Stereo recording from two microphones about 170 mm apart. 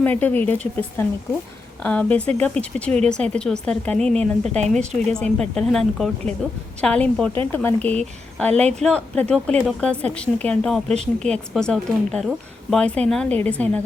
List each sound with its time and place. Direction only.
0.0 s a woman's voice: 10° left (ahead or behind)
4.2 s a woman's voice: 40° right (ahead or behind)
4.9 s a woman's voice: 5° left (ahead or behind)